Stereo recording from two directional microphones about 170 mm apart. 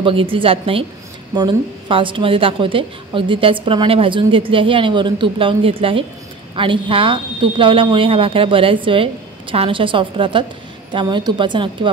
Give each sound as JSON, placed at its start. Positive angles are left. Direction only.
{"t": 0.0, "sound": "a woman's voice", "side_deg": -30}